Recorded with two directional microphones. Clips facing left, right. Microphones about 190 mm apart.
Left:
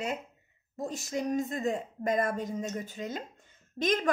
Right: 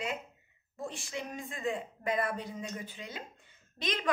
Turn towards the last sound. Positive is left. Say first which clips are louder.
# left 7 dB
turn(degrees=45)  # may be behind; listen again after turning